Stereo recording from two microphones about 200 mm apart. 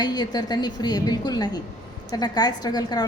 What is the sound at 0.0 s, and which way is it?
A woman's voice, 20° left (ahead or behind).